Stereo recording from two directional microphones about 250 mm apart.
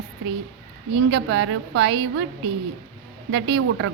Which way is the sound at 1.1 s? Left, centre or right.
Right.